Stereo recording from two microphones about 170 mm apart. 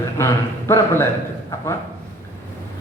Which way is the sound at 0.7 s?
15° left (ahead or behind).